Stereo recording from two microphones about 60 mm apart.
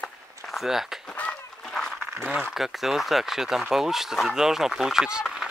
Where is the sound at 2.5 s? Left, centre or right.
Centre.